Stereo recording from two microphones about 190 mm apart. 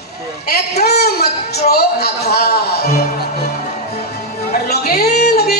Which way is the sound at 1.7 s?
55° left (ahead or behind).